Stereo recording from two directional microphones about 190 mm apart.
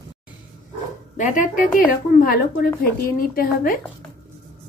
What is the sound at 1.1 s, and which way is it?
A woman's voice, 40° left (ahead or behind).